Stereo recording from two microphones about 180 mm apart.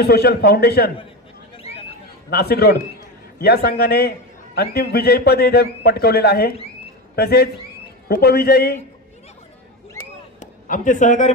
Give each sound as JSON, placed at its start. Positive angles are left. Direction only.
{"t": 0.0, "sound": "a man's voice", "side_deg": 60}
{"t": 1.5, "sound": "a sound", "side_deg": 35}
{"t": 2.2, "sound": "a man's voice", "side_deg": 60}
{"t": 10.4, "sound": "speech", "side_deg": 45}